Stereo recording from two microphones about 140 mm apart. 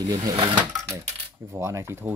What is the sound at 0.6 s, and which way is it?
Coin, 10° right (ahead or behind).